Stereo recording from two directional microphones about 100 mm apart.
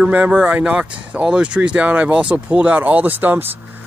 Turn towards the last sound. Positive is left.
turn(degrees=-20)  # may be behind; listen again after turning